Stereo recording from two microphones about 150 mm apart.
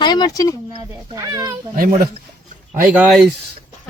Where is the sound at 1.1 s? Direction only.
25° right (ahead or behind).